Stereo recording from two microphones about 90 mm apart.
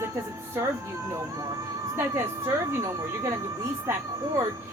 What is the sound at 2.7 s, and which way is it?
Speech, 35° right (ahead or behind).